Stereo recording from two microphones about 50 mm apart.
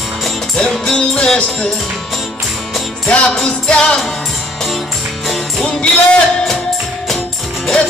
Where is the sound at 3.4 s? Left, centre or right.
Centre.